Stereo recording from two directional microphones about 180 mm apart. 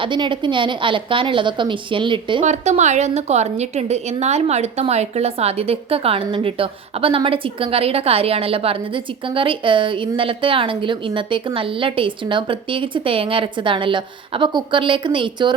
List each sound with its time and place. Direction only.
0.0 s a woman's voice: 25° right (ahead or behind)
2.4 s a woman's voice: 40° right (ahead or behind)